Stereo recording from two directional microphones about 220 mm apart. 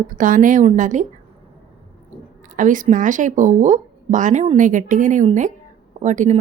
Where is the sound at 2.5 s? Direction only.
35° right (ahead or behind).